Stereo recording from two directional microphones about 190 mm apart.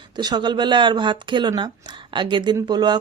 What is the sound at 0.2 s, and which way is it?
A woman's voice, 20° right (ahead or behind).